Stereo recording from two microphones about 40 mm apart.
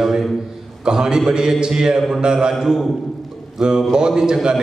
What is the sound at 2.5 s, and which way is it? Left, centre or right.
A man's voice, centre.